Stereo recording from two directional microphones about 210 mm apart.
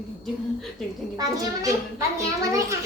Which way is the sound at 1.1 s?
20° right (ahead or behind).